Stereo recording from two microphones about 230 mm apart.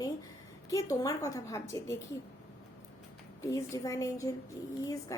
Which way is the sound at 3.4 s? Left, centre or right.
Centre.